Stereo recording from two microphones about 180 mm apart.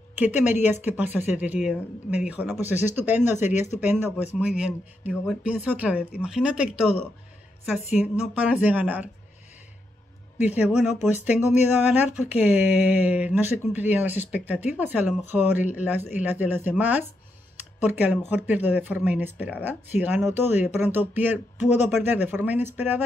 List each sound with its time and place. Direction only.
0.2 s speech: 10° right (ahead or behind)
10.8 s speech: 5° right (ahead or behind)